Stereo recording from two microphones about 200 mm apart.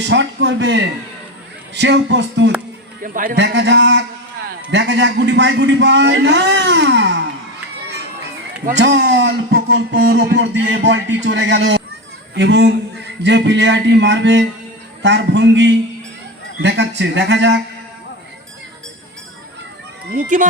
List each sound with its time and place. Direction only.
0.0 s speech: 65° right (ahead or behind)
3.0 s a man's voice: 45° right (ahead or behind)
3.3 s speech: 60° right (ahead or behind)
8.8 s speech: 60° right (ahead or behind)
20.1 s speech: 40° right (ahead or behind)